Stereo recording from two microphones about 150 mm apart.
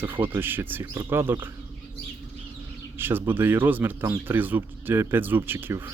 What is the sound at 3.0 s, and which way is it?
A man's voice, 15° right (ahead or behind).